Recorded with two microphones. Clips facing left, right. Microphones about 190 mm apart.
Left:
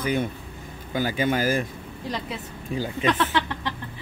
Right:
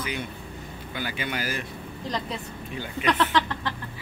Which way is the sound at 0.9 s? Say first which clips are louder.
Left 8 dB; 40° left (ahead or behind).